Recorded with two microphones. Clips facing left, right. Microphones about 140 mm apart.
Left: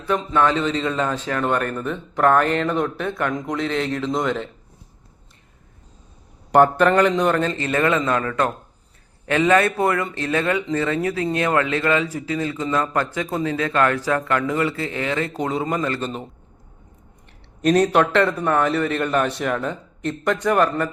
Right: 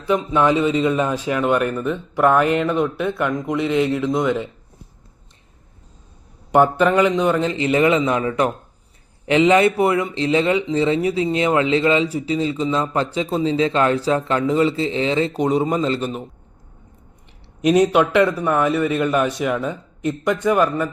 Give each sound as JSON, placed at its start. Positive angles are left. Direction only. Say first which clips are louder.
{"t": 0.1, "sound": "a man's voice", "louder": "right 2 dB", "side_deg": -15}
{"t": 6.5, "sound": "a man's voice", "louder": "even", "side_deg": -5}
{"t": 17.6, "sound": "a man's voice", "louder": "right 2 dB", "side_deg": -10}